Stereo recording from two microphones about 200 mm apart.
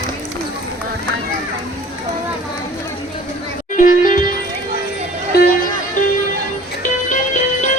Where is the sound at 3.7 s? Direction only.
40° left (ahead or behind).